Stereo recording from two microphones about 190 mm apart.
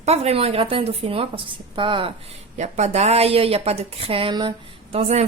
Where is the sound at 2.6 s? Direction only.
35° right (ahead or behind).